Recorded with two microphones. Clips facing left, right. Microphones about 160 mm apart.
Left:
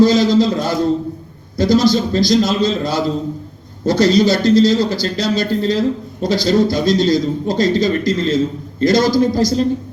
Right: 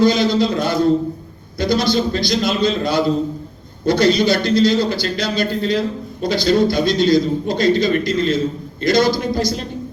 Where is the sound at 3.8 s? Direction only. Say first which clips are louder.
Left 2 dB; 35° left (ahead or behind).